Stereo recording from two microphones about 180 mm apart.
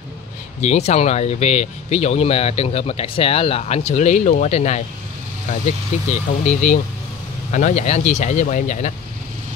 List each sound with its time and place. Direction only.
0.6 s speech: 40° left (ahead or behind)